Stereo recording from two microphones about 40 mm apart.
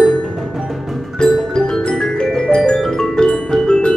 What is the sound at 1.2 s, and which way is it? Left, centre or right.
Music, centre.